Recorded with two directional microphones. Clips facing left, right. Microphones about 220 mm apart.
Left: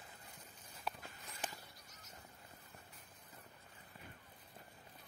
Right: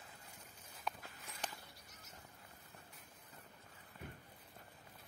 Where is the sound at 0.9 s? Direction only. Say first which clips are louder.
Even; 5° left (ahead or behind).